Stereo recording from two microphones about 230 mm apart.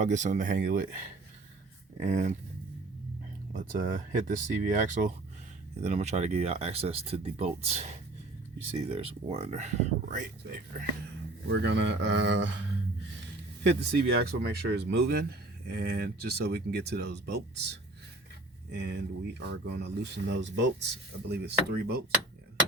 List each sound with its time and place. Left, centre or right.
0.0 s speech: right
3.5 s speech: right
8.9 s speech: right
11.4 s a man's voice: right
13.7 s a man's voice: right
18.7 s a man's voice: right